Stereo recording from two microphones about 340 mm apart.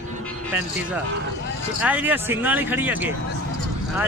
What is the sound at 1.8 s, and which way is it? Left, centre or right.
Speech, centre.